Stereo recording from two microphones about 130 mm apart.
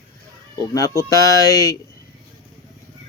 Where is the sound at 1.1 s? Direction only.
25° left (ahead or behind).